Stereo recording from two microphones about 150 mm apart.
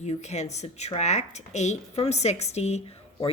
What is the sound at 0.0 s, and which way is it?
Speech, 50° left (ahead or behind).